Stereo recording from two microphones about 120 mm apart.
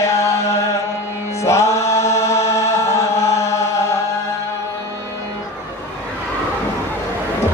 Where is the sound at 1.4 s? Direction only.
25° left (ahead or behind).